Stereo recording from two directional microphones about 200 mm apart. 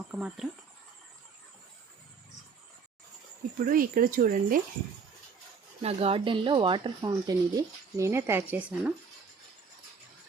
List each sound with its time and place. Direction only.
0.1 s speech: 5° right (ahead or behind)
3.7 s speech: 45° right (ahead or behind)
5.8 s speech: 30° right (ahead or behind); by 8.9 s 5° right (ahead or behind)